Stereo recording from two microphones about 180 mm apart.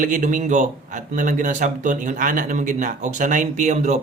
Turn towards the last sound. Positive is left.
turn(degrees=-40)  # may be behind; listen again after turning